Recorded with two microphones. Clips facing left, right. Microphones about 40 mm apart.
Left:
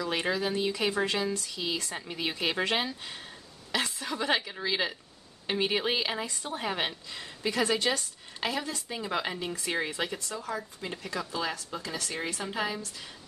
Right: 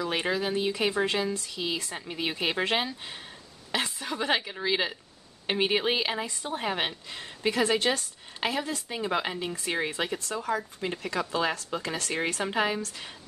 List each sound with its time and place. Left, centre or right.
0.0 s speech: centre
7.1 s speech: right
10.2 s speech: right